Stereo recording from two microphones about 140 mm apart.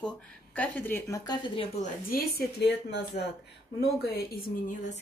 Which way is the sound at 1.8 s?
75° left (ahead or behind).